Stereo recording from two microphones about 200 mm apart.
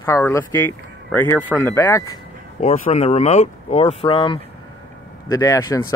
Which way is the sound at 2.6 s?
35° left (ahead or behind).